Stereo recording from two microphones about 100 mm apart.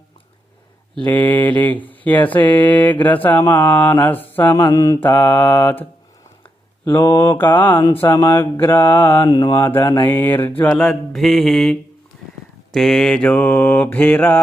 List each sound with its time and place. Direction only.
0.9 s a sound: 15° left (ahead or behind)
3.0 s speech: 15° left (ahead or behind)
4.6 s mantra: 35° left (ahead or behind)
4.9 s speech: 20° left (ahead or behind)
6.8 s speech: 30° left (ahead or behind)
7.9 s speech: 30° left (ahead or behind)
9.2 s mantra: 50° left (ahead or behind)
9.6 s speech: 25° left (ahead or behind)
10.6 s a sound: 15° left (ahead or behind)
10.8 s mantra: 5° left (ahead or behind)
12.7 s a sound: 5° left (ahead or behind); by 14.3 s 20° left (ahead or behind)